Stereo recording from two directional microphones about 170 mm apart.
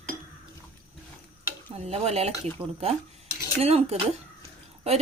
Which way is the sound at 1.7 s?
40° right (ahead or behind).